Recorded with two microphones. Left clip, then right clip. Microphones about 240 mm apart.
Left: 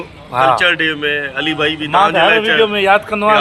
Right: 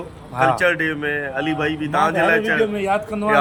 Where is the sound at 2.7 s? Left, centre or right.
Left.